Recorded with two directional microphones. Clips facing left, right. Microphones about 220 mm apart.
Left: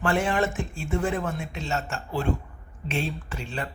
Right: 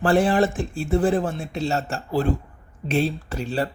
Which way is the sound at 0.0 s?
35° right (ahead or behind).